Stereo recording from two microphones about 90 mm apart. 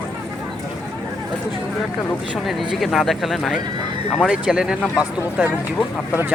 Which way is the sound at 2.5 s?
Centre (ahead or behind).